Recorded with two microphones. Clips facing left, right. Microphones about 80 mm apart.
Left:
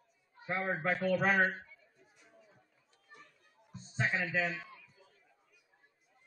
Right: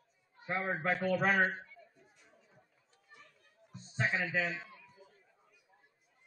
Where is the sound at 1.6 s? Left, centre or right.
Centre.